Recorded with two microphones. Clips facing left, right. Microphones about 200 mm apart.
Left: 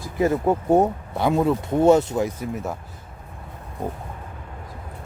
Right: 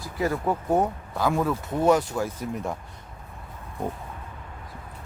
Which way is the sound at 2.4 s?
5° left (ahead or behind).